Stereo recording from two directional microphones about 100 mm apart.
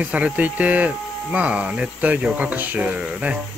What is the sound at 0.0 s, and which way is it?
Speech, 15° right (ahead or behind).